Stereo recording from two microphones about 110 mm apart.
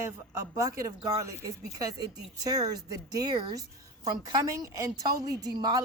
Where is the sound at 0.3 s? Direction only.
30° right (ahead or behind).